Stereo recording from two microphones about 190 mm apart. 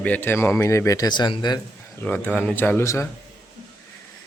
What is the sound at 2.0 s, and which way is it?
Speech, 10° left (ahead or behind).